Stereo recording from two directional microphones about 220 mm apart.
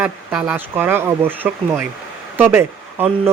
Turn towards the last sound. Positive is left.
turn(degrees=-10)  # may be behind; listen again after turning